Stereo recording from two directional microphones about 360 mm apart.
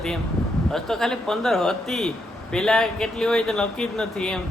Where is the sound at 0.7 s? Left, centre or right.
Centre.